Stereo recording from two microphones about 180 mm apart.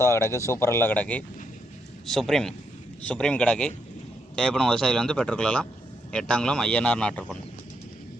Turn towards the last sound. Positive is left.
turn(degrees=5)  # may be behind; listen again after turning